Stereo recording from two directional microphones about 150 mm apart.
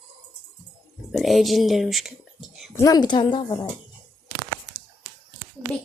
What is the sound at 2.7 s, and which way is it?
Speech, 20° left (ahead or behind).